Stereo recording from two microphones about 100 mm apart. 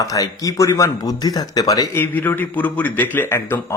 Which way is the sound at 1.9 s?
20° left (ahead or behind).